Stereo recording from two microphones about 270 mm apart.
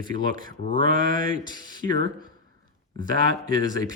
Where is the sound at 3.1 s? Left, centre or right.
Centre.